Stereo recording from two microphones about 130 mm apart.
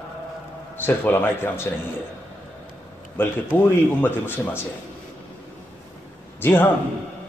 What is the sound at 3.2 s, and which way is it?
Speech, 15° left (ahead or behind).